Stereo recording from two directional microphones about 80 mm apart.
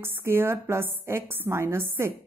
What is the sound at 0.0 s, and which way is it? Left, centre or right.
A woman's voice, right.